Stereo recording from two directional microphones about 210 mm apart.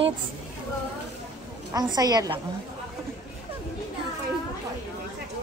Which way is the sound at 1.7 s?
20° right (ahead or behind).